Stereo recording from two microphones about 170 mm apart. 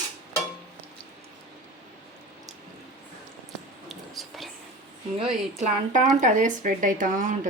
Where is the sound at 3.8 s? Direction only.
Centre (ahead or behind).